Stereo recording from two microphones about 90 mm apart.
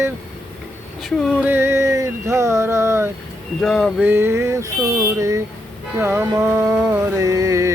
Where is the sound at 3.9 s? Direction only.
25° right (ahead or behind); by 5.1 s 40° right (ahead or behind).